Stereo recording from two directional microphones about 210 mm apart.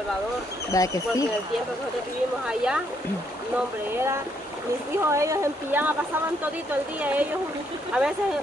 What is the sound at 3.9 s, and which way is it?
Speech, 10° right (ahead or behind).